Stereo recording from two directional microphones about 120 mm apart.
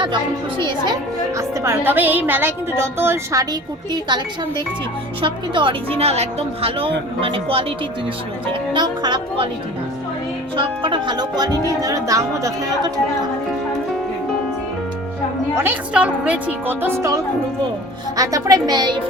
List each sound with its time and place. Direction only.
1.4 s speech: 20° right (ahead or behind)
5.2 s speech: 45° right (ahead or behind)
6.0 s speech: 60° right (ahead or behind)
8.7 s speech: 35° right (ahead or behind)
10.6 s speech: 45° right (ahead or behind)
15.5 s a woman's voice: 15° right (ahead or behind)
18.2 s speech: 30° right (ahead or behind)